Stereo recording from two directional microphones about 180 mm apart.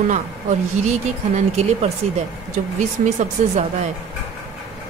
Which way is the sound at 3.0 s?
40° right (ahead or behind).